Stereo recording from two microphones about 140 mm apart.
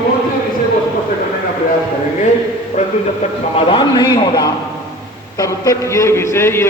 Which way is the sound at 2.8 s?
55° left (ahead or behind).